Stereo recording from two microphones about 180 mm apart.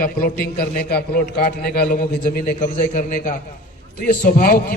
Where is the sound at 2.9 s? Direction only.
45° left (ahead or behind).